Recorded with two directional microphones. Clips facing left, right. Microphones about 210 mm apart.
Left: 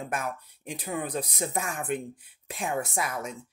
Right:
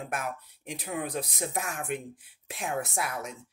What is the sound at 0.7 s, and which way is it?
Speech, centre (ahead or behind).